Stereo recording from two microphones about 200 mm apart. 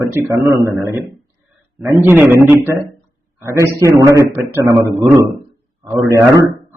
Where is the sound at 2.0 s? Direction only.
10° right (ahead or behind).